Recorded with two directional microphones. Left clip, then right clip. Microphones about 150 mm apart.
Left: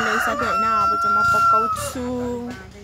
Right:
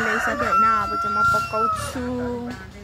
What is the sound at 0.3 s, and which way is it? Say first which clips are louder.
Speech: right 1 dB; 15° left (ahead or behind).